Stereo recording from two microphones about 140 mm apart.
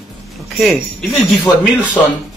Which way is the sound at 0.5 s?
Centre (ahead or behind).